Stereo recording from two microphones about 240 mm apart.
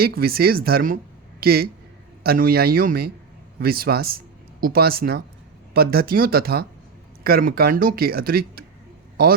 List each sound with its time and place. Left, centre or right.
0.0 s speech: right